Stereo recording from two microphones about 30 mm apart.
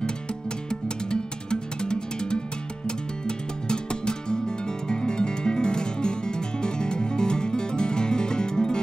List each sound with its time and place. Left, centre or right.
0.7 s music: left